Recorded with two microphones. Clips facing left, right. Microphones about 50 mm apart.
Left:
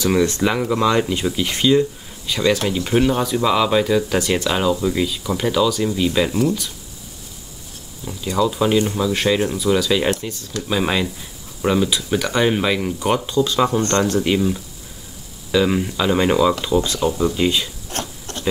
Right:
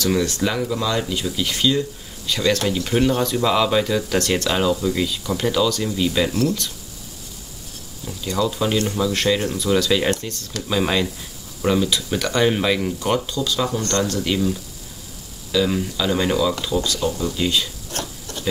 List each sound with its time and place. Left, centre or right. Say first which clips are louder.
0.0 s speech: left 3 dB; left
2.2 s speech: left 1 dB; centre
8.1 s speech: left 3 dB; centre
13.0 s speech: left 3 dB; left
17.9 s a sound: left 2 dB; left